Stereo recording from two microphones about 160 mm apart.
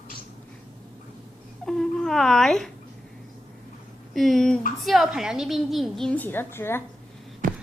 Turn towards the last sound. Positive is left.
turn(degrees=-60)  # may be behind; listen again after turning